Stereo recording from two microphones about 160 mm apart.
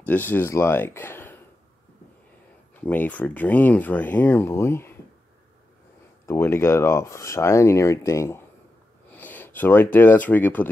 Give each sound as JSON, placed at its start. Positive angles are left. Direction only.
{"t": 0.0, "sound": "speech", "side_deg": 10}
{"t": 2.8, "sound": "speech", "side_deg": 10}
{"t": 6.2, "sound": "speech", "side_deg": 15}
{"t": 9.1, "sound": "a sound", "side_deg": 10}
{"t": 9.9, "sound": "speech", "side_deg": 10}